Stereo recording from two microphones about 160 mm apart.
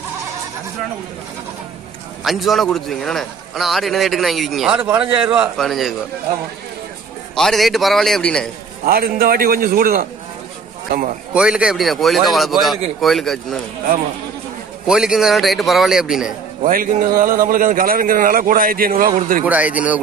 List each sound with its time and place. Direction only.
2.2 s a man's voice: centre (ahead or behind)
7.3 s a man's voice: centre (ahead or behind)
8.8 s a man's voice: 70° right (ahead or behind)
11.3 s a man's voice: 5° right (ahead or behind)
14.9 s a man's voice: 5° right (ahead or behind)
16.6 s a man's voice: 60° right (ahead or behind)
19.4 s a man's voice: 10° right (ahead or behind)